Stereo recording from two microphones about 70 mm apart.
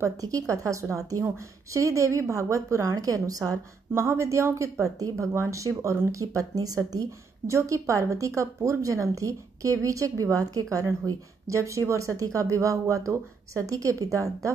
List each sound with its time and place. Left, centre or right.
0.0 s a woman's voice: right
3.9 s a woman's voice: right